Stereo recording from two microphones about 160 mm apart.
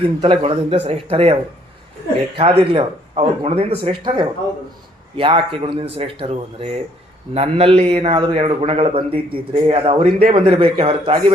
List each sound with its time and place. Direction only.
0.2 s a man's voice: 35° right (ahead or behind)
2.4 s a man's voice: 40° right (ahead or behind)